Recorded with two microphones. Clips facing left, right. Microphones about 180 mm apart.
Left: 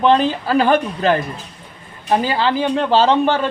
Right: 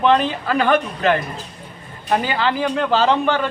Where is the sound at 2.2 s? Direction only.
30° left (ahead or behind).